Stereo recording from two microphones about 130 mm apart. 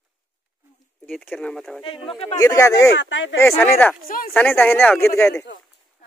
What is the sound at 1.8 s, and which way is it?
Speech, 40° left (ahead or behind).